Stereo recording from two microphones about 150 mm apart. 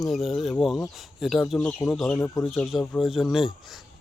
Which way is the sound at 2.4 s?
Centre (ahead or behind).